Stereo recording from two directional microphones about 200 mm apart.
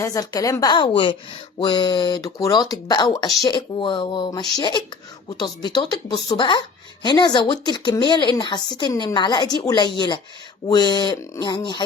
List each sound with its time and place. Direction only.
0.0 s a woman's voice: 15° left (ahead or behind)